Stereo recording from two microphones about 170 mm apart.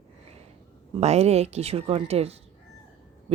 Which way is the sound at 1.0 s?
40° right (ahead or behind).